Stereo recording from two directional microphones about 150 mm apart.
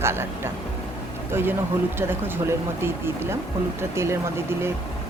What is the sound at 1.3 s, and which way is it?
Speech, 15° right (ahead or behind).